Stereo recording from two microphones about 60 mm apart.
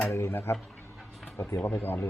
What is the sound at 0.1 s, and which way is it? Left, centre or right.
Speech, left.